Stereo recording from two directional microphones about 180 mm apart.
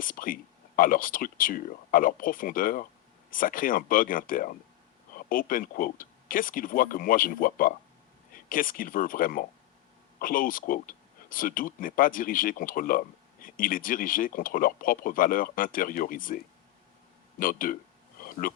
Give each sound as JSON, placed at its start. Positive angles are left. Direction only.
{"t": 0.0, "sound": "speech", "side_deg": 50}
{"t": 17.4, "sound": "speech", "side_deg": 50}
{"t": 18.2, "sound": "a sound", "side_deg": 50}